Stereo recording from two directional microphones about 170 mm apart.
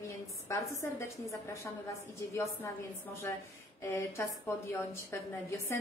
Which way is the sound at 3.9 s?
15° left (ahead or behind).